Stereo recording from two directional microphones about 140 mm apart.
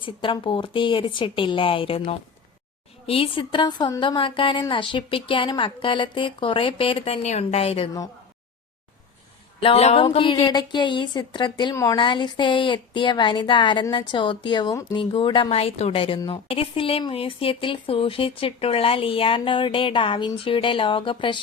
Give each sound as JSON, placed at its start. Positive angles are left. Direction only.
{"t": 0.0, "sound": "a woman's voice", "side_deg": 35}
{"t": 9.6, "sound": "a woman's voice", "side_deg": 45}
{"t": 11.7, "sound": "speech", "side_deg": 20}
{"t": 11.9, "sound": "a woman's voice", "side_deg": 35}
{"t": 15.1, "sound": "a woman's voice", "side_deg": 35}